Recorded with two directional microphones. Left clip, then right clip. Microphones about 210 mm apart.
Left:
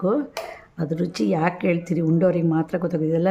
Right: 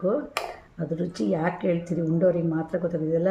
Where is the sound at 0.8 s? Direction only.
30° left (ahead or behind).